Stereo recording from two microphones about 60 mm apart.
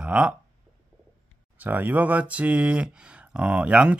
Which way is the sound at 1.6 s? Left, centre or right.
Right.